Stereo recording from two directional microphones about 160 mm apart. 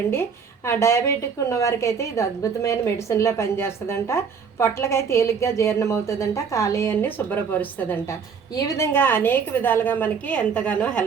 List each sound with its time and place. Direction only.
0.1 s a woman's voice: 15° left (ahead or behind)